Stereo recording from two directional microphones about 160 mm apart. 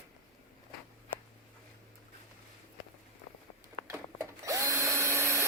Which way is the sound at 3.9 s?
20° right (ahead or behind).